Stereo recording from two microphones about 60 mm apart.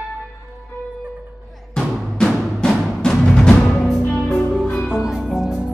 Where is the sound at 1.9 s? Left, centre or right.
Centre.